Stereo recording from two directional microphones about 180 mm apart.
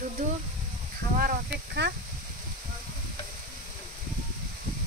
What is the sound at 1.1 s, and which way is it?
Speech, 60° right (ahead or behind).